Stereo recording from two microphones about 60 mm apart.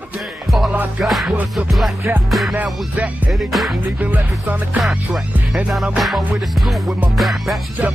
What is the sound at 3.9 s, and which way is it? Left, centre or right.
Music, right.